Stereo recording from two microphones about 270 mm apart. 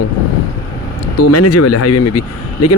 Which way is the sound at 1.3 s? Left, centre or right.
Left.